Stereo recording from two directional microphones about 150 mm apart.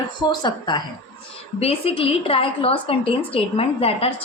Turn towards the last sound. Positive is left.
turn(degrees=40)  # may be behind; listen again after turning